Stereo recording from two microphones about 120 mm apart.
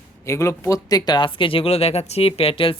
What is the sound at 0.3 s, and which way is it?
Speech, 25° left (ahead or behind).